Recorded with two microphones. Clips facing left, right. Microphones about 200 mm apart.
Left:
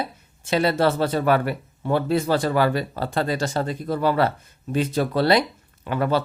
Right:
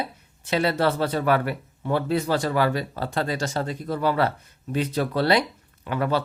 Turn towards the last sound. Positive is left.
turn(degrees=35)  # may be behind; listen again after turning